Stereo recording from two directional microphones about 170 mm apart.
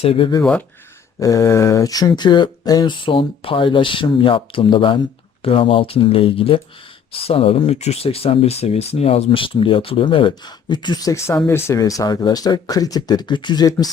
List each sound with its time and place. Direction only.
0.0 s speech: 30° left (ahead or behind)
1.2 s speech: 20° left (ahead or behind)